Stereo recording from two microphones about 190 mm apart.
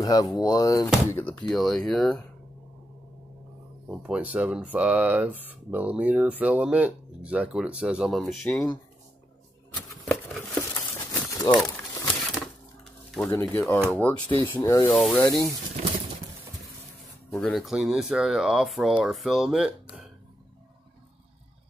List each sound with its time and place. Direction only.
0.0 s speech: 20° left (ahead or behind)
1.1 s speech: 10° left (ahead or behind)
3.9 s speech: 5° right (ahead or behind)
8.5 s speech: 10° left (ahead or behind)
9.8 s a sound: 5° left (ahead or behind)
10.7 s crumpling: 20° left (ahead or behind)
12.8 s a sound: 5° left (ahead or behind)
13.3 s speech: 10° left (ahead or behind)
14.3 s speech: 25° right (ahead or behind)
14.6 s speech: 15° left (ahead or behind)
14.9 s speech: 5° left (ahead or behind)
15.2 s speech: 15° left (ahead or behind)
15.8 s pigeon: 40° right (ahead or behind)
17.3 s speech: 5° left (ahead or behind)